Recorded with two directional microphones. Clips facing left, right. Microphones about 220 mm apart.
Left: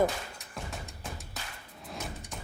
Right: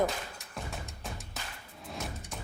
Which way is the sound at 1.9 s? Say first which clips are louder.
Even; centre (ahead or behind).